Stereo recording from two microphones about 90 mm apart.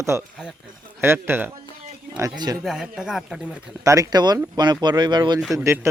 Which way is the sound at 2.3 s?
50° right (ahead or behind).